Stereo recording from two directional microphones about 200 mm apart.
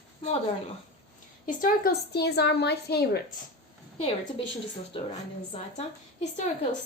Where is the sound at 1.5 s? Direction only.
50° left (ahead or behind).